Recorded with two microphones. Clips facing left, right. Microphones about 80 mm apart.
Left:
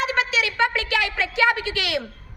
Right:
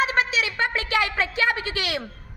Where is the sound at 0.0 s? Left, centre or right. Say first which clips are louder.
Even; right.